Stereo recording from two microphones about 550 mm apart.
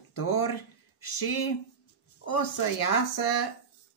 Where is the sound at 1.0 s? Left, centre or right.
Left.